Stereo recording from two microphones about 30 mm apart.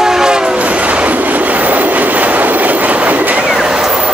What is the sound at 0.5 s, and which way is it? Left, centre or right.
Train, right.